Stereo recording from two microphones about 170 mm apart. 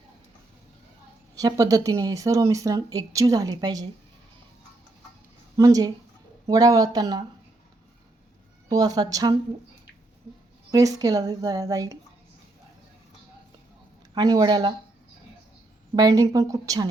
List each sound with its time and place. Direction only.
1.4 s a woman's voice: 20° right (ahead or behind)
5.5 s a woman's voice: 20° right (ahead or behind)
8.7 s a woman's voice: 20° right (ahead or behind)
10.7 s a woman's voice: 20° right (ahead or behind)
14.2 s a woman's voice: 20° right (ahead or behind)
16.0 s a woman's voice: 20° right (ahead or behind)